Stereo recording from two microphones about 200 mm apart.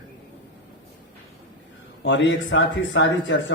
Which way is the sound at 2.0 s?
65° left (ahead or behind).